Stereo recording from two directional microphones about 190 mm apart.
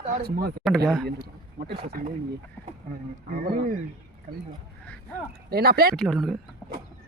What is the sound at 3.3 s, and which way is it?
Speech, 50° right (ahead or behind).